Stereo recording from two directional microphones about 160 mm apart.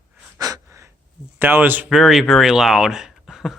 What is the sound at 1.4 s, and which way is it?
Speech, 15° right (ahead or behind).